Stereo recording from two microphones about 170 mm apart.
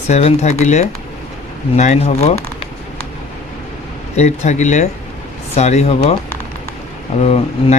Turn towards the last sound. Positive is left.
turn(degrees=35)  # may be behind; listen again after turning